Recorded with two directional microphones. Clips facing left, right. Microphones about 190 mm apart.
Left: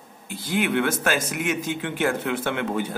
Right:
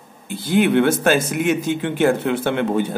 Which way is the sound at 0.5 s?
30° right (ahead or behind).